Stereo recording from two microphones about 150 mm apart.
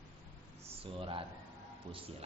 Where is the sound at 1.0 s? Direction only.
35° right (ahead or behind).